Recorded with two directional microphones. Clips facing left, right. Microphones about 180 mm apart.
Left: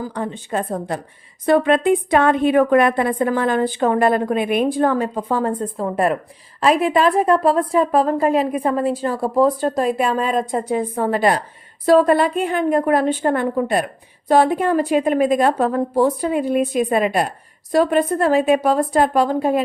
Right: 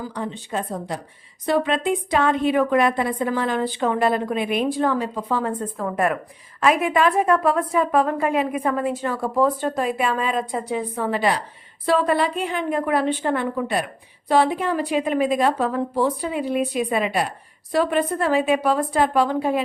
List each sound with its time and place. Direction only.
0.0 s a woman's voice: 50° left (ahead or behind)